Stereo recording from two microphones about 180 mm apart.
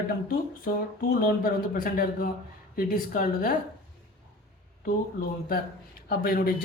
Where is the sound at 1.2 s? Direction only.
50° left (ahead or behind).